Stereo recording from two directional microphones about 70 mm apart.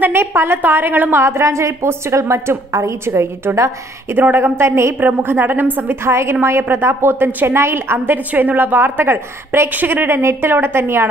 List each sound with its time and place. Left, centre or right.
0.0 s a woman's voice: right
1.2 s a woman's voice: right
4.1 s a woman's voice: right